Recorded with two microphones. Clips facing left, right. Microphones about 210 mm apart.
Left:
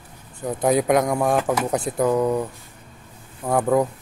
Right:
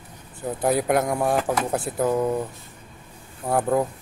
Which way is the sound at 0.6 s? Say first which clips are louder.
Left 3 dB; 5° right (ahead or behind).